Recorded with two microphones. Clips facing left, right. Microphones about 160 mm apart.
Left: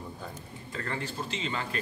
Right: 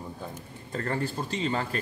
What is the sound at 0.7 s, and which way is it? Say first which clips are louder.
A man's voice: right 5 dB; 40° right (ahead or behind).